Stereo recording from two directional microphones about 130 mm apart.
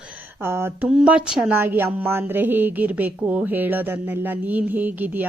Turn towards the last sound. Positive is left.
turn(degrees=-15)  # may be behind; listen again after turning